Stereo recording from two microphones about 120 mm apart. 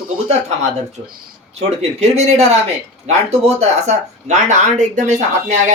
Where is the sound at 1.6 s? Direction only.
65° right (ahead or behind).